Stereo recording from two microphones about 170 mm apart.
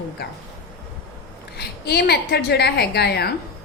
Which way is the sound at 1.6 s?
70° left (ahead or behind).